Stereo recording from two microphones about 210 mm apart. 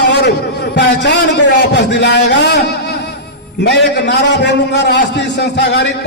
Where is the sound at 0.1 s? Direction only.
55° left (ahead or behind).